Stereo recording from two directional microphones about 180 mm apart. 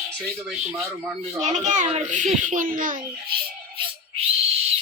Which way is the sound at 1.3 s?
40° right (ahead or behind).